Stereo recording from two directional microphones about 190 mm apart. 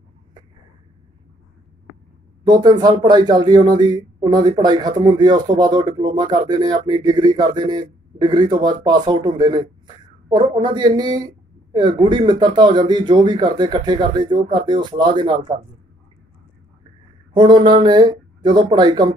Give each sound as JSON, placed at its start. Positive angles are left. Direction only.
{"t": 2.4, "sound": "speech", "side_deg": -20}
{"t": 17.3, "sound": "speech", "side_deg": -25}